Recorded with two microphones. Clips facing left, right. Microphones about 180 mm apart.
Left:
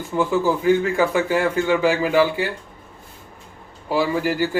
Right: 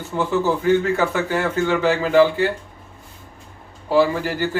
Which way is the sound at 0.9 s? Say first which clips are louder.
Left 2 dB; 15° left (ahead or behind).